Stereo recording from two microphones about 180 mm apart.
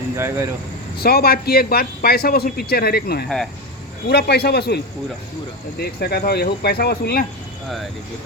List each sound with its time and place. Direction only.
0.2 s speech: 15° right (ahead or behind)
1.0 s a man's voice: 60° left (ahead or behind)
3.2 s speech: centre (ahead or behind)
4.1 s a man's voice: 60° left (ahead or behind)
5.8 s a man's voice: 60° left (ahead or behind)